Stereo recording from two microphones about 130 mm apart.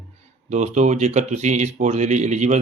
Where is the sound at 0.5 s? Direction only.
65° right (ahead or behind).